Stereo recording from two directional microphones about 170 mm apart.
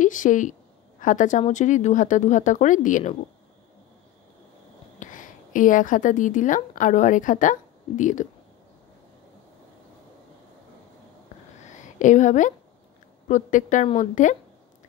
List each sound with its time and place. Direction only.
0.0 s speech: 50° left (ahead or behind)
5.0 s a woman's voice: 50° left (ahead or behind)
11.7 s a sound: 45° left (ahead or behind)
13.3 s speech: 50° left (ahead or behind)